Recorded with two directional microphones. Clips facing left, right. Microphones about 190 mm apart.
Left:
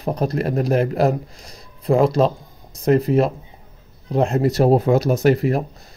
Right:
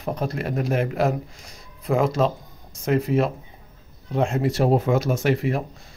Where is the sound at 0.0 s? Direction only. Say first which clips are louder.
Left 5 dB; 35° left (ahead or behind).